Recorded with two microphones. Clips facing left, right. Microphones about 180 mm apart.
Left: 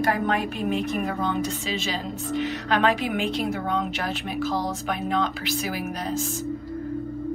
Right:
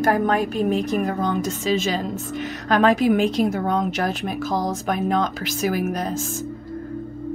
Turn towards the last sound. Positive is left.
turn(degrees=-45)  # may be behind; listen again after turning